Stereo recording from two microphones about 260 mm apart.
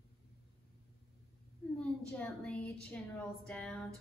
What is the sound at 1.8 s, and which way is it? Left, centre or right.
A woman's voice, centre.